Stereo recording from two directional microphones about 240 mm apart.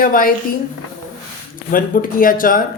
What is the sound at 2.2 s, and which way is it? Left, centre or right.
Speech, left.